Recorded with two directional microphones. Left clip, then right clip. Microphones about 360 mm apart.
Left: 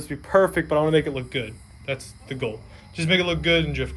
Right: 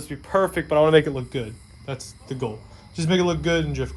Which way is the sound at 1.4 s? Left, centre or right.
Right.